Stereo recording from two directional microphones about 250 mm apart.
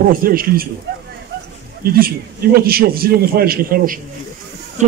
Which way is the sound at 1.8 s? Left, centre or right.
Right.